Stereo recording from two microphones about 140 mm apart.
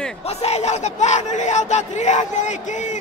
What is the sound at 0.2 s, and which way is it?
Speech, 50° left (ahead or behind).